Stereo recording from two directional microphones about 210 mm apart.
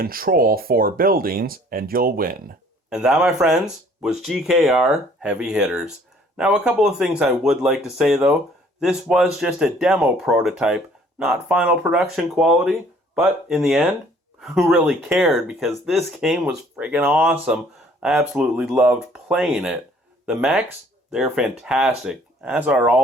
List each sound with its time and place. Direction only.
0.0 s speech: 45° right (ahead or behind)
2.9 s speech: 5° right (ahead or behind)